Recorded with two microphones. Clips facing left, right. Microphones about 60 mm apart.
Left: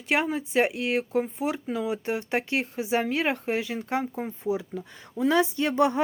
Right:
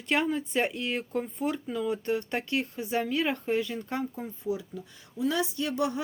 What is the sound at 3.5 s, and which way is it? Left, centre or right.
Speech, left.